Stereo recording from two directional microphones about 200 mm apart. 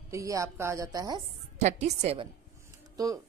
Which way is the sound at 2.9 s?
20° right (ahead or behind).